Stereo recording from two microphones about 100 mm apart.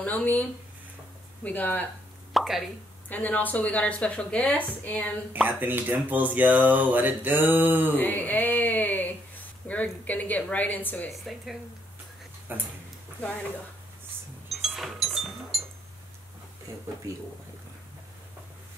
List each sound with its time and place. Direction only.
0.0 s speech: 15° left (ahead or behind)
2.3 s plop: centre (ahead or behind)
3.1 s speech: 15° left (ahead or behind)
5.3 s speech: 20° right (ahead or behind)
8.0 s a sound: 15° left (ahead or behind)
9.7 s speech: 15° left (ahead or behind)
12.5 s speech: 20° right (ahead or behind)
13.2 s speech: 10° left (ahead or behind)
14.5 s cash register: centre (ahead or behind)